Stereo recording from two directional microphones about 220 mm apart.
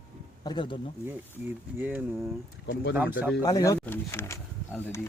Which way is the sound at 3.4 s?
15° left (ahead or behind).